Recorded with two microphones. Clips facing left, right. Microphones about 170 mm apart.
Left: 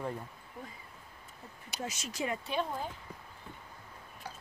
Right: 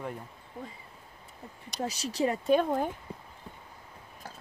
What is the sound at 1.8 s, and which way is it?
Speech, 35° right (ahead or behind).